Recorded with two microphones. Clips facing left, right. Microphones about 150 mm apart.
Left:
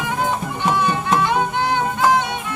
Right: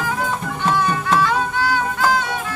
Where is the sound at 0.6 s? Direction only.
20° left (ahead or behind).